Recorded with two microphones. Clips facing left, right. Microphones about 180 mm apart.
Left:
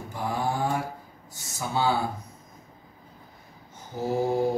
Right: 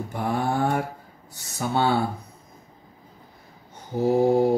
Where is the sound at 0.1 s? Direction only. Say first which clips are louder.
Right 3 dB; 60° right (ahead or behind).